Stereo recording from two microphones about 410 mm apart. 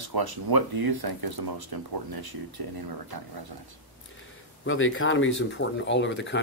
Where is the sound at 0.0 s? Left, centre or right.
Right.